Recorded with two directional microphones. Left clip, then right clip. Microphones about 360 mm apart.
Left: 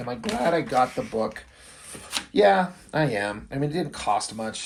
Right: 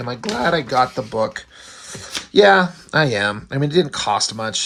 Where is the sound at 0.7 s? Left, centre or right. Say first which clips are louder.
Right 5 dB; right.